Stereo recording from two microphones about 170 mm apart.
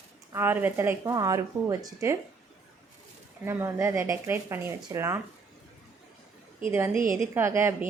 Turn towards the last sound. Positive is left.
turn(degrees=-15)  # may be behind; listen again after turning